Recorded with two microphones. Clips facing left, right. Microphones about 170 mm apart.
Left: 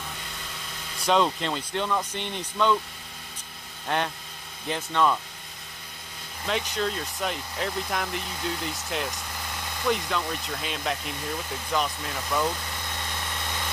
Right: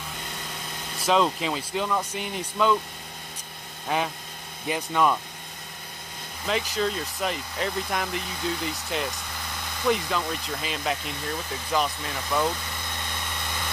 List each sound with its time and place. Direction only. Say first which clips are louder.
1.0 s speech: right 1 dB; centre (ahead or behind)
3.8 s speech: right 1 dB; 5° right (ahead or behind)
6.4 s speech: right 2 dB; centre (ahead or behind)